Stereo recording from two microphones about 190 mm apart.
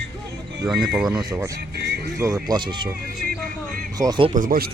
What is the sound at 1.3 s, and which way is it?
Speech, 15° right (ahead or behind).